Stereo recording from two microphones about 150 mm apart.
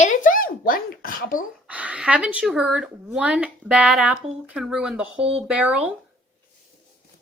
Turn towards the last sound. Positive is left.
turn(degrees=-10)  # may be behind; listen again after turning